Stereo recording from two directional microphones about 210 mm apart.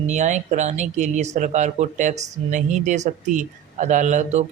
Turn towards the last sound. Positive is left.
turn(degrees=-35)  # may be behind; listen again after turning